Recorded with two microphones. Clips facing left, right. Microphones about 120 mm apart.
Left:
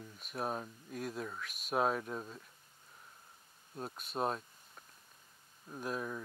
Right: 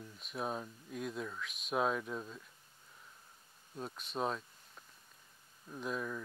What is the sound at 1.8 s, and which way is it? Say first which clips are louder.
Speech: left 1 dB; 45° left (ahead or behind).